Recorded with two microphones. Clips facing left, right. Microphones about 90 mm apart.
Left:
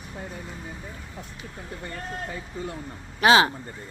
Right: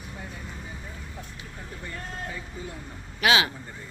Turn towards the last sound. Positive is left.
turn(degrees=35)  # may be behind; listen again after turning